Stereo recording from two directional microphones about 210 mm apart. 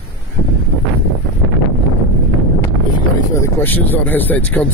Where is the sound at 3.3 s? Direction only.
10° left (ahead or behind).